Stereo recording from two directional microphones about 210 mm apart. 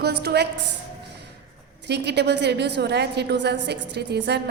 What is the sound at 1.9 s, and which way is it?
A woman's voice, 55° right (ahead or behind).